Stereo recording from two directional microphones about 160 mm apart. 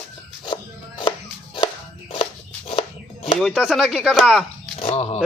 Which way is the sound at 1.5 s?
30° left (ahead or behind).